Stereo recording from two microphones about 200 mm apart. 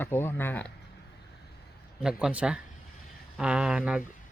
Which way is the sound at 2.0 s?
5° right (ahead or behind).